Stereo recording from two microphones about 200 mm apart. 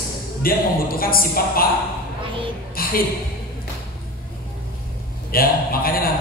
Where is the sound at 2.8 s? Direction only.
45° left (ahead or behind).